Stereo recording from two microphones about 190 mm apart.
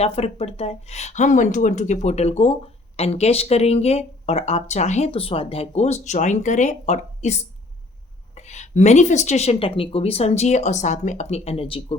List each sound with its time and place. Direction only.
0.0 s speech: 35° left (ahead or behind)